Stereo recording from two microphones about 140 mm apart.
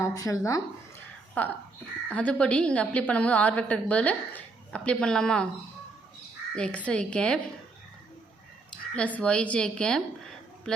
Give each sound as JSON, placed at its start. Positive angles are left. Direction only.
{"t": 0.0, "sound": "speech", "side_deg": 25}
{"t": 1.4, "sound": "a woman's voice", "side_deg": 10}
{"t": 6.6, "sound": "a woman's voice", "side_deg": 10}
{"t": 9.0, "sound": "speech", "side_deg": 10}